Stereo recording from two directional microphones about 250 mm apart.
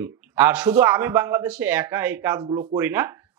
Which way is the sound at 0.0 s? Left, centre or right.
Centre.